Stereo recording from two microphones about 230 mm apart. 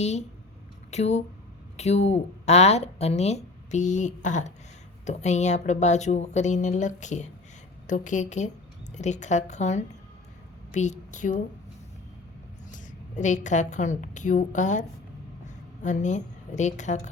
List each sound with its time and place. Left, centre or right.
0.0 s a woman's voice: left
12.7 s a woman's voice: left